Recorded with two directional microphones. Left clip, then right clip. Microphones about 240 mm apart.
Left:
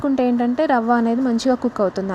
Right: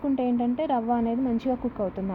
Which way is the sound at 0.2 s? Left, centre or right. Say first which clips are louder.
Left 8 dB; left.